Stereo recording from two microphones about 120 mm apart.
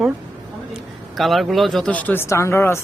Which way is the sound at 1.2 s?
Centre (ahead or behind).